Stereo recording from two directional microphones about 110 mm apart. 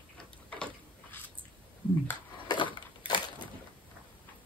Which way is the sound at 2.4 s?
45° left (ahead or behind).